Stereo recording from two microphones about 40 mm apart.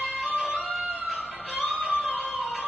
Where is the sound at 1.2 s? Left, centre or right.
Right.